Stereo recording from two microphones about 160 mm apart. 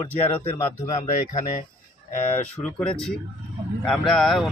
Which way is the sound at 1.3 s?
55° left (ahead or behind).